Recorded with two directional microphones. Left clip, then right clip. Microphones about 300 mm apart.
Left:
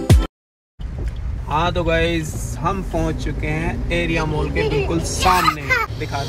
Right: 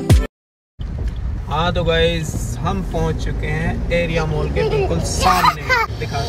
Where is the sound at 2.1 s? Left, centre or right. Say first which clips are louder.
Left 1 dB; centre.